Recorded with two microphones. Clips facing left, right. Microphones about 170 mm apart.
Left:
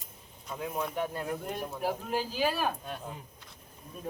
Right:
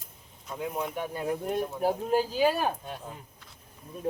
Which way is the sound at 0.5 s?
5° right (ahead or behind).